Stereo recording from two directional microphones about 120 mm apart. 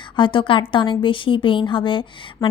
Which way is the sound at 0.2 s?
45° left (ahead or behind).